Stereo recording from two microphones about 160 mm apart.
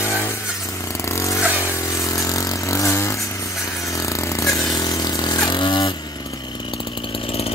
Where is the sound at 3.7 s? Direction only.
20° left (ahead or behind).